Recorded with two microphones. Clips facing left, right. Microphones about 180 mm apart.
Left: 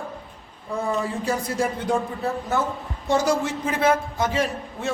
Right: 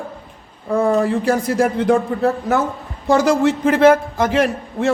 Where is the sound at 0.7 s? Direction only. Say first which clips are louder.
Right 10 dB; 60° right (ahead or behind); by 3.8 s 80° right.